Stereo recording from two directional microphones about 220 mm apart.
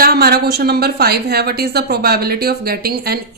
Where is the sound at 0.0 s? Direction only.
45° right (ahead or behind).